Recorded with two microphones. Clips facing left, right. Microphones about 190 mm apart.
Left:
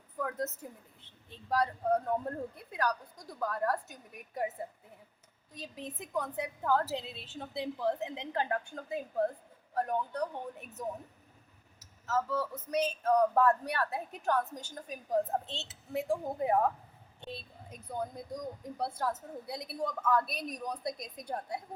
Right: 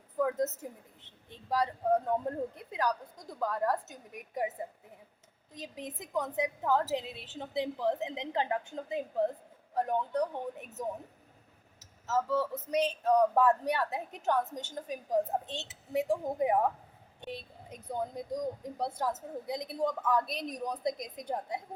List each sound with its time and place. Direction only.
0.2 s a woman's voice: 20° right (ahead or behind)
5.5 s a woman's voice: 15° right (ahead or behind)